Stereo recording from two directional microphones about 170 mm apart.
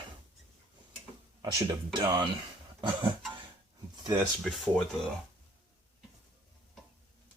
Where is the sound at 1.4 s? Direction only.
25° right (ahead or behind).